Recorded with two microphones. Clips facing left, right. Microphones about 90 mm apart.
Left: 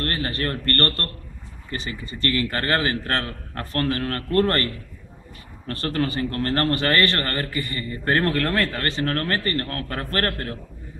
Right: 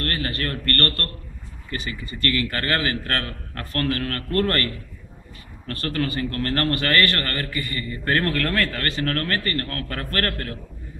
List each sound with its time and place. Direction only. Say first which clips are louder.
0.0 s a man's voice: left 1 dB; 25° left (ahead or behind)
5.7 s a man's voice: left 1 dB; 25° left (ahead or behind)